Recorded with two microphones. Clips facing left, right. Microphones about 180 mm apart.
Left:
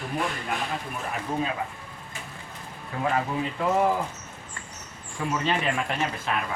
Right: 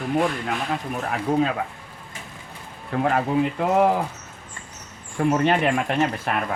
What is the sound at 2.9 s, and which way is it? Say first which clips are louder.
Speech: right 6 dB; 70° right (ahead or behind).